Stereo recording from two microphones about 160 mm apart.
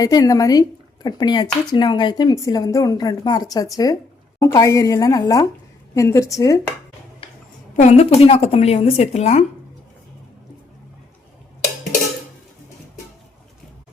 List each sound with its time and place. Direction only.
0.0 s speech: 20° left (ahead or behind)
7.8 s speech: 45° left (ahead or behind)